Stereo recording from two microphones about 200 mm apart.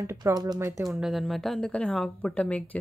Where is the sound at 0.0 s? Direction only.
15° right (ahead or behind).